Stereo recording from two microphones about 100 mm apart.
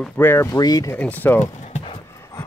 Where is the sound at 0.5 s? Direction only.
40° left (ahead or behind).